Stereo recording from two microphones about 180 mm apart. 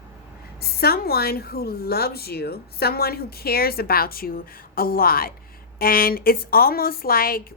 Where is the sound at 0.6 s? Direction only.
60° left (ahead or behind).